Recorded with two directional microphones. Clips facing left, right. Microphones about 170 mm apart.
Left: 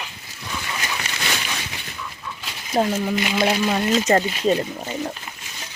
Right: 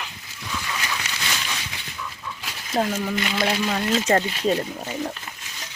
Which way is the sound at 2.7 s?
15° left (ahead or behind).